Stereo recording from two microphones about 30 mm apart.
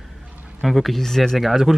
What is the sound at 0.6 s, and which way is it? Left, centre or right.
Speech, centre.